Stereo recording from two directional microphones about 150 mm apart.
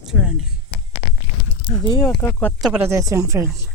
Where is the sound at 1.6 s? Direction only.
30° left (ahead or behind).